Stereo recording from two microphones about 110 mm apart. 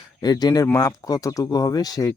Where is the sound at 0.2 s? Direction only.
40° left (ahead or behind).